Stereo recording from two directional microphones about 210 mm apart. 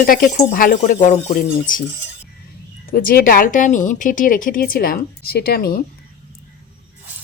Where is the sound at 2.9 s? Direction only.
45° left (ahead or behind).